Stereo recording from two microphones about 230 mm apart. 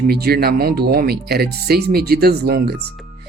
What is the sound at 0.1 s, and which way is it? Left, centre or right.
Speech, right.